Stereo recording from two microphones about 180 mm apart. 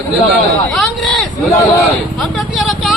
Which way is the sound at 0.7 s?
Centre (ahead or behind).